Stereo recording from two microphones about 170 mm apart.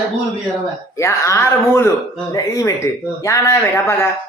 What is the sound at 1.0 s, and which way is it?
Speech, 15° left (ahead or behind).